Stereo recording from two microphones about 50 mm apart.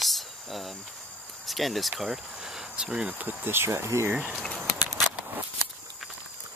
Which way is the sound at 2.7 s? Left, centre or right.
Centre.